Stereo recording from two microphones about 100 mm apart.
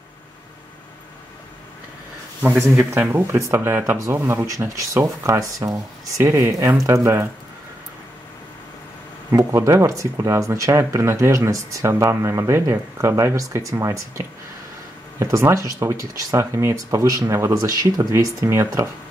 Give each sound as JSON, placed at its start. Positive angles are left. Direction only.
{"t": 2.4, "sound": "speech", "side_deg": -15}
{"t": 9.5, "sound": "speech", "side_deg": -30}